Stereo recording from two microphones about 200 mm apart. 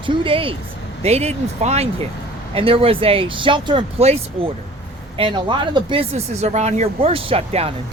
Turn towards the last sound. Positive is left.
turn(degrees=-30)  # may be behind; listen again after turning